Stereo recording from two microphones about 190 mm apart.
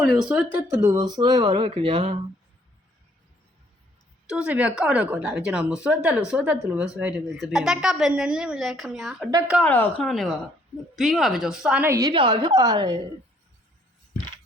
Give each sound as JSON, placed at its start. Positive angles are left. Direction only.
{"t": 0.1, "sound": "a woman's voice", "side_deg": -5}
{"t": 4.3, "sound": "a woman's voice", "side_deg": -5}
{"t": 9.6, "sound": "a woman's voice", "side_deg": 10}